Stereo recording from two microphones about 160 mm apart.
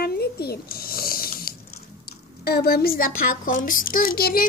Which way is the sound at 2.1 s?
80° left.